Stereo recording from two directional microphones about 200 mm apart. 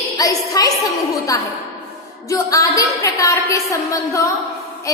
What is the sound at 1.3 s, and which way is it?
A woman's voice, 15° left (ahead or behind).